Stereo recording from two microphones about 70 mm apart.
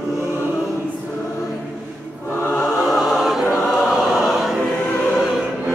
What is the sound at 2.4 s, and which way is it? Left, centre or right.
Music, left.